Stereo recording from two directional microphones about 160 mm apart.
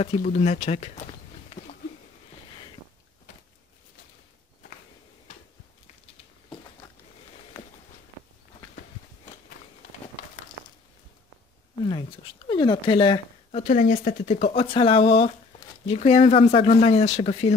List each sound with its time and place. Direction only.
0.0 s speech: 45° left (ahead or behind)
11.8 s dog: 30° left (ahead or behind)
13.6 s speech: 55° left (ahead or behind)
14.3 s speech: 35° left (ahead or behind)